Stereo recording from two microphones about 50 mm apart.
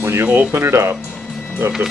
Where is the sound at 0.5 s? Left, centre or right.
Right.